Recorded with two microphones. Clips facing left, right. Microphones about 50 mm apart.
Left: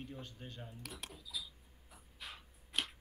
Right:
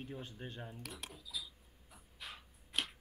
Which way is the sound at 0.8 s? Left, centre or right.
Centre.